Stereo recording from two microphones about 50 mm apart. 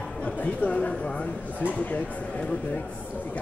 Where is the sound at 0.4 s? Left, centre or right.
Left.